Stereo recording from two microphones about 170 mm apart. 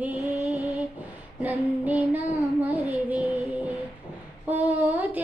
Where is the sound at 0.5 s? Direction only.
20° left (ahead or behind).